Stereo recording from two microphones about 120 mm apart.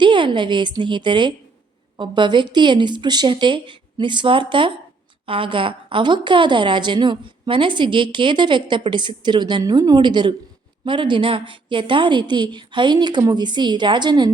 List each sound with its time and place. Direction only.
0.0 s a woman's voice: 40° right (ahead or behind)